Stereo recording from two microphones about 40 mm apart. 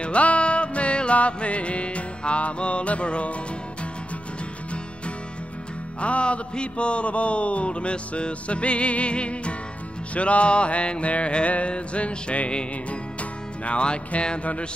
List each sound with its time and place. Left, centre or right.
0.0 s music: left
5.9 s music: left